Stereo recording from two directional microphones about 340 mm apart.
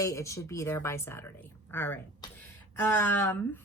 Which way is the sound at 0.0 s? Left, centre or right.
Centre.